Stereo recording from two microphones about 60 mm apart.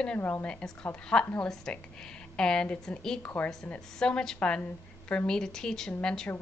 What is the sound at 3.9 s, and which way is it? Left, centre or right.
A woman's voice, centre.